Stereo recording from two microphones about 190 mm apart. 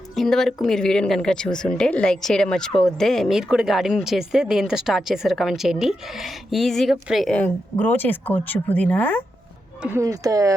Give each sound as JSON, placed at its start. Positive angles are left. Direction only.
{"t": 0.2, "sound": "speech", "side_deg": 0}
{"t": 9.8, "sound": "speech", "side_deg": -15}